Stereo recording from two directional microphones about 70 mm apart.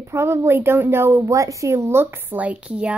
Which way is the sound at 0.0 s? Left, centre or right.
Right.